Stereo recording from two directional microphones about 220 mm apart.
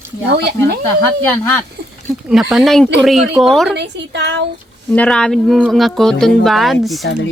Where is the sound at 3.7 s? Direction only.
50° right (ahead or behind).